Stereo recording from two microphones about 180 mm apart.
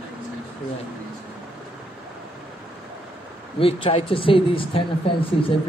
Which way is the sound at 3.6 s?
30° left (ahead or behind).